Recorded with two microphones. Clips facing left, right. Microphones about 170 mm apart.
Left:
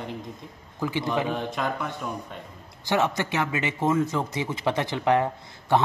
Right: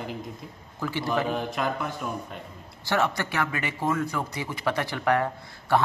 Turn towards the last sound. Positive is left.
turn(degrees=20)  # may be behind; listen again after turning